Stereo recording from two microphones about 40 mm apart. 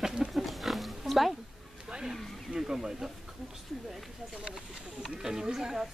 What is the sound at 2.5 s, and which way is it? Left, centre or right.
Speech, centre.